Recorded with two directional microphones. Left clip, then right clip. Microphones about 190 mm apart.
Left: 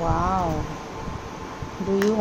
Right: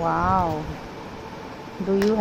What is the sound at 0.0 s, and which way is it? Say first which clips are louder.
Speech: right 2 dB; 25° right (ahead or behind).